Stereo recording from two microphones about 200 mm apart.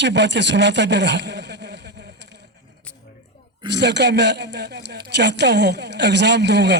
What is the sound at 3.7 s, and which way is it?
Speech, 60° right (ahead or behind).